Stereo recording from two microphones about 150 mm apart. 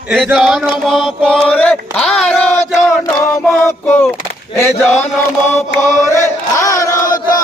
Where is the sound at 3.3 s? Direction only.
15° left (ahead or behind).